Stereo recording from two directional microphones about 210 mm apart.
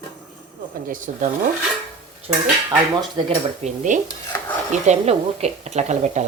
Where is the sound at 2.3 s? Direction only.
25° right (ahead or behind).